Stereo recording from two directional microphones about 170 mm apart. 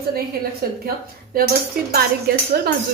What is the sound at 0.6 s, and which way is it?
A woman's voice, 65° right (ahead or behind).